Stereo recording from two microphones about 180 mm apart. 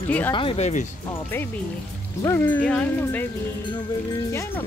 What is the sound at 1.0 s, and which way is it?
Speech, 15° left (ahead or behind).